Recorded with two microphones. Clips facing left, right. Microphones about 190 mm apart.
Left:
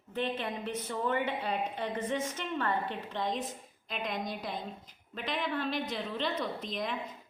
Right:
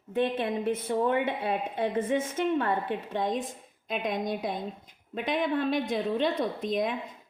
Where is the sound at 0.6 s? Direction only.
55° right (ahead or behind).